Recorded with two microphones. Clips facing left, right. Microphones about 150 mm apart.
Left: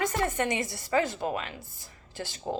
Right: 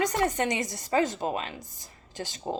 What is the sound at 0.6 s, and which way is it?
Speech, 45° right (ahead or behind).